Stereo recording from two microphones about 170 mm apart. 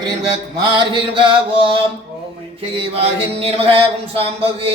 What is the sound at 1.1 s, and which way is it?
Mantra, 30° right (ahead or behind).